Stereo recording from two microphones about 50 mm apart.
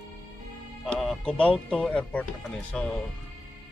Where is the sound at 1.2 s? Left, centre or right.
Centre.